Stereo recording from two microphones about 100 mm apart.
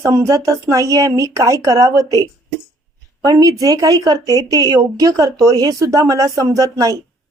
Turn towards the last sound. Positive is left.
turn(degrees=-35)  # may be behind; listen again after turning